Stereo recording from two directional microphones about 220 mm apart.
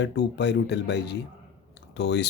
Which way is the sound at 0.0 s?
50° left (ahead or behind).